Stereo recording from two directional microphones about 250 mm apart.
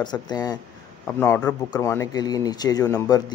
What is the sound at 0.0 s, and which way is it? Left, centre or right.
Speech, centre.